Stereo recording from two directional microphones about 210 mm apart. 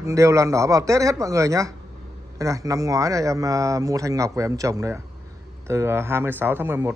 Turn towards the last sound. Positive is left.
turn(degrees=-10)  # may be behind; listen again after turning